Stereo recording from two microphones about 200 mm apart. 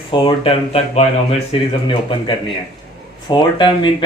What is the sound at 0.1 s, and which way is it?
Speech, 25° left (ahead or behind).